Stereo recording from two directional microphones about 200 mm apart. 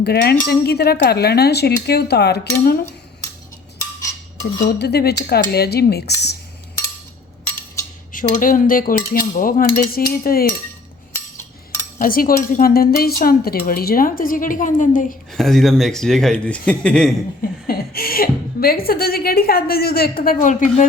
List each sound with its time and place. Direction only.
0.0 s speech: 55° left (ahead or behind)
4.6 s speech: 50° left (ahead or behind)
8.1 s speech: 40° left (ahead or behind)
11.1 s a sound: 10° left (ahead or behind)
11.9 s speech: 45° left (ahead or behind)
15.3 s speech: centre (ahead or behind)
17.7 s speech: 50° left (ahead or behind)